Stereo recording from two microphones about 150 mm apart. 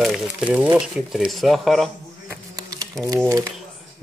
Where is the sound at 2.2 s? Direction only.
25° right (ahead or behind).